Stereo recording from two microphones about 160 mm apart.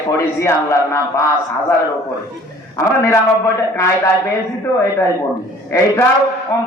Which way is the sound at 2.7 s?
20° left (ahead or behind).